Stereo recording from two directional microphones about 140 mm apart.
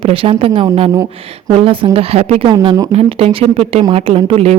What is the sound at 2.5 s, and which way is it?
Speech, 35° right (ahead or behind).